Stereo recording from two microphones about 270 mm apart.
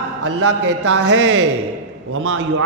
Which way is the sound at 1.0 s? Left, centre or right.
Right.